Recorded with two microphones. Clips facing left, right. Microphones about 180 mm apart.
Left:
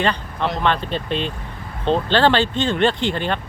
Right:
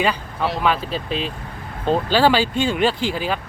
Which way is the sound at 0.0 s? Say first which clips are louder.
Even; 5° right (ahead or behind).